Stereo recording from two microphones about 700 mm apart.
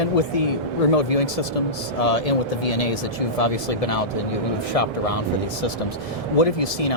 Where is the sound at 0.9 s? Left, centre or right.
Left.